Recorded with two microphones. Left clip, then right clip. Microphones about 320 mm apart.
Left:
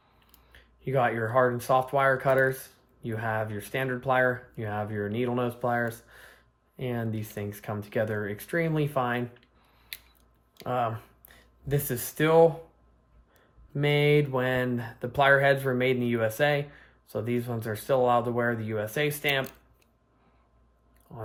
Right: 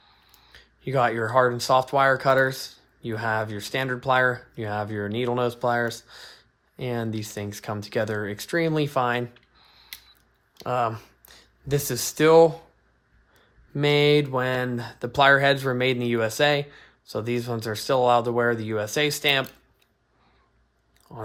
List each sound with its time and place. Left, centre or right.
0.5 s speech: centre
10.7 s speech: centre
13.7 s speech: centre
21.1 s speech: centre